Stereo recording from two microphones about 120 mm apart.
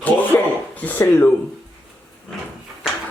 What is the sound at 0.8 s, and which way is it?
Speech, 15° left (ahead or behind).